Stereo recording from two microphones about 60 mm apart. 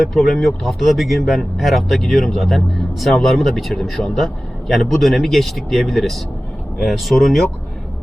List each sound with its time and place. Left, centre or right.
0.1 s speech: centre